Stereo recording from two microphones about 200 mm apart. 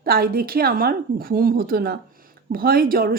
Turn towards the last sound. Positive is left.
turn(degrees=-45)  # may be behind; listen again after turning